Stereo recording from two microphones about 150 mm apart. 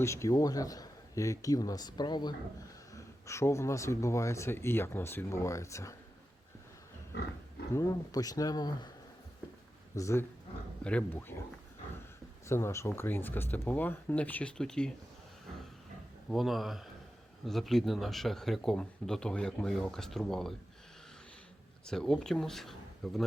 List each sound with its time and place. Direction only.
0.0 s speech: 20° left (ahead or behind)
2.9 s speech: 20° left (ahead or behind)
7.7 s speech: 20° left (ahead or behind)
9.9 s speech: 20° left (ahead or behind)
12.5 s speech: 20° left (ahead or behind)
16.3 s speech: centre (ahead or behind)
21.8 s speech: 5° left (ahead or behind)